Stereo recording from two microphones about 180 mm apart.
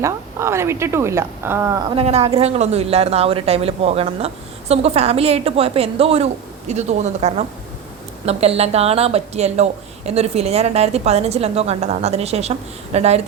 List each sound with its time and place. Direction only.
0.0 s speech: 15° right (ahead or behind)
2.0 s a woman's voice: 35° right (ahead or behind)